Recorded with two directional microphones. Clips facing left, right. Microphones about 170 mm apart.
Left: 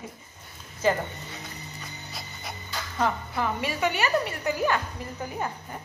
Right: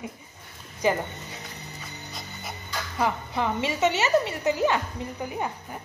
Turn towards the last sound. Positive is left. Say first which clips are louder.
# right 2 dB
turn(degrees=-15)  # may be behind; listen again after turning